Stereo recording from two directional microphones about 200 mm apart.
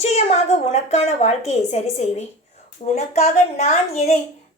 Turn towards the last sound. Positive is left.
turn(degrees=30)  # may be behind; listen again after turning